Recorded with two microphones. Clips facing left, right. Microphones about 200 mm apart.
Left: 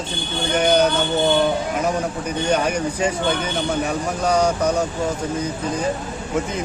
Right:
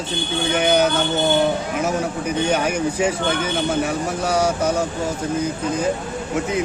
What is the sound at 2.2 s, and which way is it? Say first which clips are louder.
A man's voice: even; 5° right (ahead or behind).